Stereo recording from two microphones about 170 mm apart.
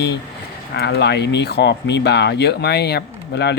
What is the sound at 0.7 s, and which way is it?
Speech, 75° left (ahead or behind).